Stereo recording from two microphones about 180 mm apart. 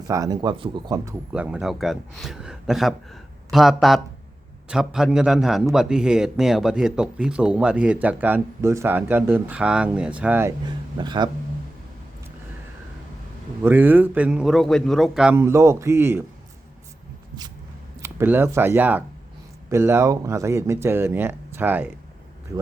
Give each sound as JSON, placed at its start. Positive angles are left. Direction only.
{"t": 0.1, "sound": "speech", "side_deg": -20}
{"t": 1.3, "sound": "a man's voice", "side_deg": -5}
{"t": 10.7, "sound": "speech", "side_deg": -25}
{"t": 13.6, "sound": "a man's voice", "side_deg": -10}
{"t": 15.4, "sound": "speech", "side_deg": -15}
{"t": 18.0, "sound": "speech", "side_deg": -15}